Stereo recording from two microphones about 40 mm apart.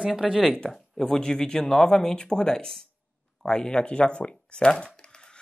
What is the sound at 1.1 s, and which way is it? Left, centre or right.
Speech, centre.